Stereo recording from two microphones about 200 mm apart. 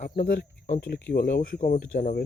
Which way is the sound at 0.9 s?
55° left (ahead or behind).